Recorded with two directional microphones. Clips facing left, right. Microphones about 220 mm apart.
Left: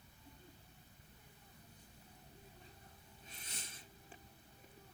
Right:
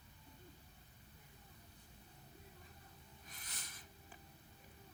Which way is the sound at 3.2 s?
25° left (ahead or behind).